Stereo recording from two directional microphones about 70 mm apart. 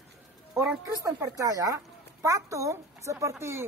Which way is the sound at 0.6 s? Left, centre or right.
Right.